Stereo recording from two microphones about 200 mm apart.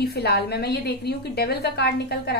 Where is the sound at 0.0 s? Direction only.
55° left (ahead or behind).